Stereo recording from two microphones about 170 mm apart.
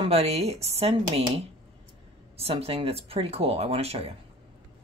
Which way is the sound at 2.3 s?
35° right (ahead or behind).